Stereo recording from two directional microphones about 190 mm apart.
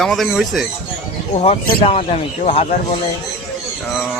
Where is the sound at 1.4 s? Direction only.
30° left (ahead or behind).